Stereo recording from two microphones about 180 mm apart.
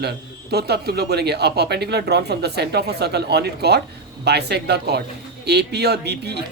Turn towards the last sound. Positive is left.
turn(degrees=-65)  # may be behind; listen again after turning